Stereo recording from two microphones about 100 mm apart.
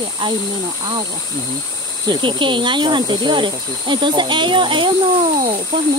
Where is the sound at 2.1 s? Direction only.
55° right (ahead or behind).